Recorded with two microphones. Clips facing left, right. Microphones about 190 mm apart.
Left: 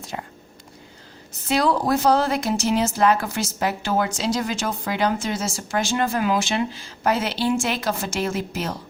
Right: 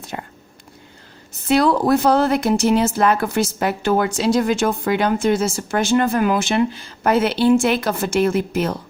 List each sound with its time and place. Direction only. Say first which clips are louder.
0.1 s a woman's voice: right 2 dB; 55° right (ahead or behind)
1.5 s a woman's voice: right 5 dB; 60° right (ahead or behind)